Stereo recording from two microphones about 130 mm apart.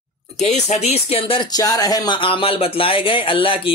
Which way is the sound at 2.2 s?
40° left (ahead or behind).